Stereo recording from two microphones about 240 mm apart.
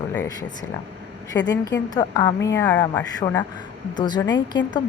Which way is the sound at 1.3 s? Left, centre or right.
Left.